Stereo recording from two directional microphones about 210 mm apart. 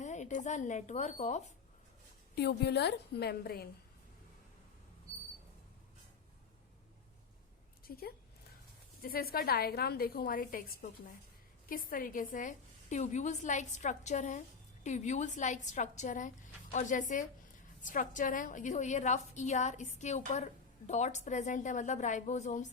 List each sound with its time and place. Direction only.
0.0 s speech: 35° left (ahead or behind)
2.3 s a woman's voice: 50° left (ahead or behind)
7.9 s a woman's voice: 45° left (ahead or behind)